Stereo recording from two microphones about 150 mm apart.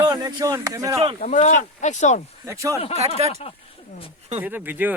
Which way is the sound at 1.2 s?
50° left (ahead or behind).